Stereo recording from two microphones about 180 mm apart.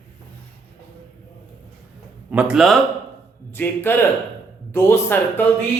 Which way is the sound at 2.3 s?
5° right (ahead or behind).